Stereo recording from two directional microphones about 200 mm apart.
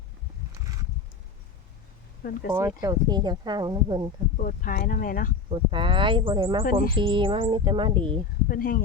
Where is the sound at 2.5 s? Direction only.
15° right (ahead or behind).